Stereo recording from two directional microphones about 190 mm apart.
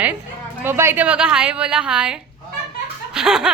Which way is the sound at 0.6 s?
10° right (ahead or behind).